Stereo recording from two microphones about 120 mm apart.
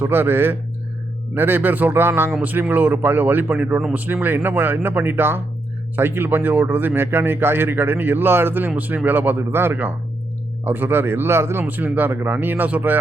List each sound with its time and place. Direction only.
0.0 s a man's voice: 15° right (ahead or behind)